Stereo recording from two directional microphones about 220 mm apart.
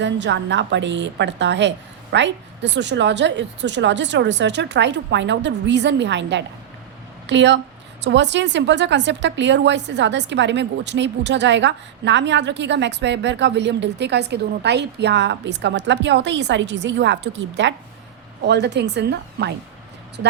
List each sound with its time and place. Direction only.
0.0 s a woman's voice: 55° right (ahead or behind)